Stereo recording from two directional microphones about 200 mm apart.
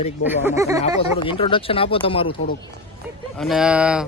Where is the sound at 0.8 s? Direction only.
25° left (ahead or behind).